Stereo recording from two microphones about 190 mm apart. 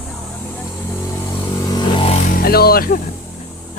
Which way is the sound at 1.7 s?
25° left (ahead or behind).